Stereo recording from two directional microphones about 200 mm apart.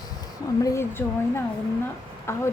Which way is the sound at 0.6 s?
15° left (ahead or behind).